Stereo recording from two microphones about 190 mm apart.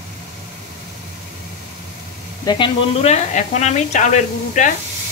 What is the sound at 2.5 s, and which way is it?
Speech, 25° left (ahead or behind).